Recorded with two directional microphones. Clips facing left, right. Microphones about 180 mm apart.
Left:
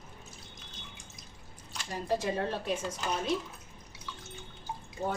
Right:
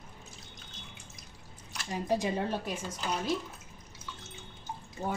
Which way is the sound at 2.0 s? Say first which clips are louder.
Even; 15° right (ahead or behind).